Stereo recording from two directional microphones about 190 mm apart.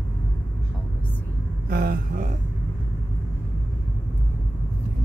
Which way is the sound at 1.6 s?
50° right (ahead or behind).